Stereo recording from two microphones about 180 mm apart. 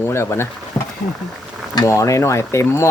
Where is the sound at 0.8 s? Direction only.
15° left (ahead or behind).